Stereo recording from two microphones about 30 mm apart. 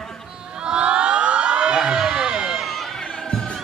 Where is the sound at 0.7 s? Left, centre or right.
Right.